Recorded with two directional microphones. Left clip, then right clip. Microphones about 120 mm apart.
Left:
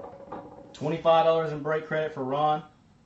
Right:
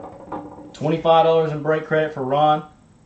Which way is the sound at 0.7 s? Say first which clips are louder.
Right 6 dB; 30° right (ahead or behind).